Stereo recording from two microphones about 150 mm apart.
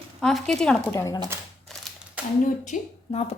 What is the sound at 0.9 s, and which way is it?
Speech, 15° left (ahead or behind).